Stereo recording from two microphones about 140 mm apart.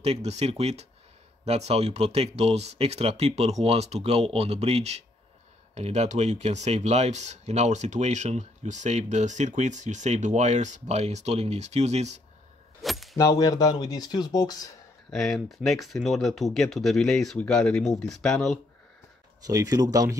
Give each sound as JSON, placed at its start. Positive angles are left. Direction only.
{"t": 0.0, "sound": "speech", "side_deg": -50}
{"t": 12.8, "sound": "keys jangling", "side_deg": 0}
{"t": 13.1, "sound": "speech", "side_deg": 25}
{"t": 15.0, "sound": "speech", "side_deg": 0}
{"t": 19.4, "sound": "speech", "side_deg": -25}